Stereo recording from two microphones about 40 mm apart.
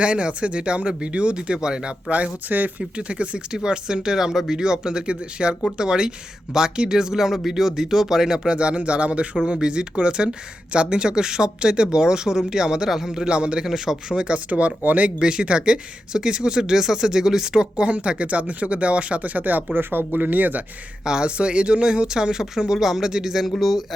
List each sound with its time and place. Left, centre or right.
0.0 s speech: right
2.0 s speech: right
2.5 s speech: right
3.1 s speech: right; by 8.4 s centre
8.4 s speech: right
13.7 s speech: centre
14.1 s speech: right
15.2 s speech: right
19.7 s speech: right
20.1 s speech: right
21.0 s speech: centre
23.6 s speech: centre